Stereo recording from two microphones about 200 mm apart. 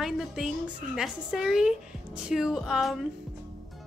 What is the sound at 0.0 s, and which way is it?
Music, centre (ahead or behind).